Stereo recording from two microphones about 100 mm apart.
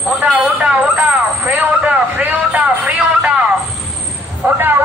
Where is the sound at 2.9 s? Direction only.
10° right (ahead or behind).